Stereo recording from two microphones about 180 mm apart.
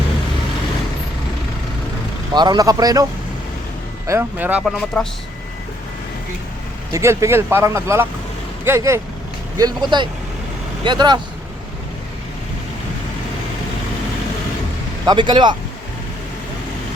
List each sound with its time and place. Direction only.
2.3 s speech: 25° right (ahead or behind)
4.6 s speech: 5° left (ahead or behind)
6.9 s speech: 15° right (ahead or behind)
15.0 s speech: 25° right (ahead or behind)